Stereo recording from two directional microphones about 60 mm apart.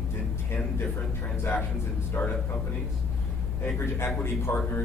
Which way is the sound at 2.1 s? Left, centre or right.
Left.